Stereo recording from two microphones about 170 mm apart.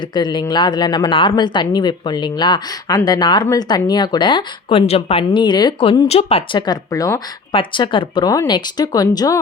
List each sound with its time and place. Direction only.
0.1 s speech: 25° left (ahead or behind)
7.5 s speech: 30° left (ahead or behind)